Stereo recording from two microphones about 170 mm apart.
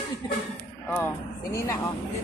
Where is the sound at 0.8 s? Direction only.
15° left (ahead or behind).